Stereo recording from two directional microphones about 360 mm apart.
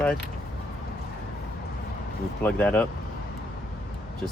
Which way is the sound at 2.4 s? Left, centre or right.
Centre.